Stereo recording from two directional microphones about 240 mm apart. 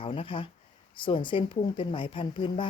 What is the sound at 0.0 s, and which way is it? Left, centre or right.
A woman's voice, left.